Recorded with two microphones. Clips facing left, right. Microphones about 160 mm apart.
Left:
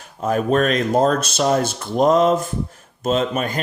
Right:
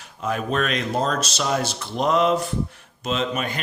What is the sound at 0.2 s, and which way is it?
Speech, 45° left (ahead or behind).